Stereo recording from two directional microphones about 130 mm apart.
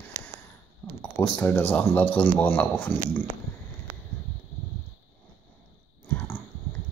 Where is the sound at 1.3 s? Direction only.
15° left (ahead or behind).